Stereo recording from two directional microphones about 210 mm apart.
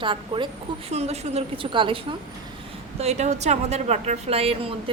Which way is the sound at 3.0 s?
30° right (ahead or behind).